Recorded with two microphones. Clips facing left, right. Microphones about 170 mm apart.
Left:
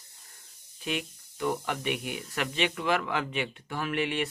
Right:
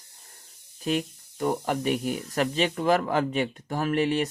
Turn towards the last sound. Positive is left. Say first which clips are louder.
# right 6 dB
turn(degrees=-40)  # may be behind; listen again after turning